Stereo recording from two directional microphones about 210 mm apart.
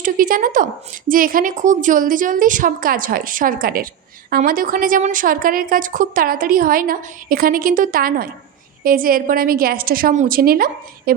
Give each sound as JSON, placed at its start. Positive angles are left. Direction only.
{"t": 0.0, "sound": "a woman's voice", "side_deg": -40}